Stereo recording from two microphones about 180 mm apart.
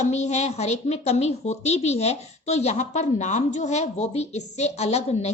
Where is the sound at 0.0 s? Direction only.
40° left (ahead or behind).